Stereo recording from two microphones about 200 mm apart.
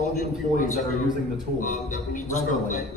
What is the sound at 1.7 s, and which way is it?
A man's voice, 40° left (ahead or behind).